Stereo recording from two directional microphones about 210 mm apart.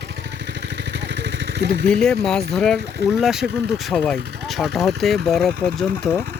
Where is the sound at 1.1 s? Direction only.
55° right (ahead or behind).